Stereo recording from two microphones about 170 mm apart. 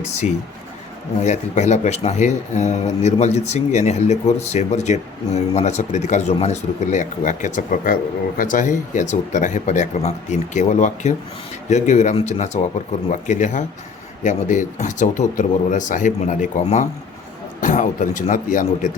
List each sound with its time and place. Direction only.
1.2 s speech: 40° left (ahead or behind)